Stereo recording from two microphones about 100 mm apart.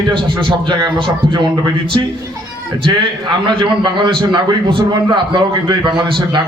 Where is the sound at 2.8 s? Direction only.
50° right (ahead or behind).